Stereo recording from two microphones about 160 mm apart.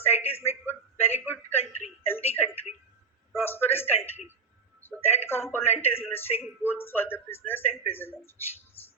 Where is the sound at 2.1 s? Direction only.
15° left (ahead or behind).